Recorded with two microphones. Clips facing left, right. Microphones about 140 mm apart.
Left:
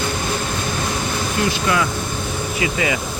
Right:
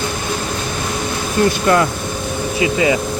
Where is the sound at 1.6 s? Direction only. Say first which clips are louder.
Right 5 dB; 50° right (ahead or behind).